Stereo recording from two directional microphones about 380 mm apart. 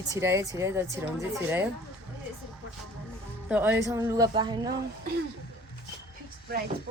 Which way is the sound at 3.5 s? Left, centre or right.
Centre.